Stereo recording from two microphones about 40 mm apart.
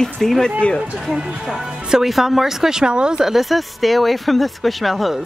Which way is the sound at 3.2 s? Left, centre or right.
Centre.